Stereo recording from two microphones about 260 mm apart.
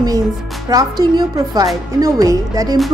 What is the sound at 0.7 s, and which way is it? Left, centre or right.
A woman's voice, centre.